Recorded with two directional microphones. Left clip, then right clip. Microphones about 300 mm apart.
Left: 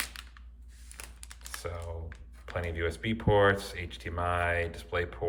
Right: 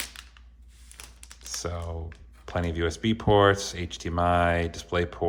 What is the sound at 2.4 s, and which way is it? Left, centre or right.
Speech, centre.